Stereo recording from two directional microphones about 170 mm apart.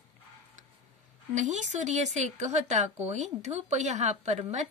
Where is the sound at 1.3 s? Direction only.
45° right (ahead or behind).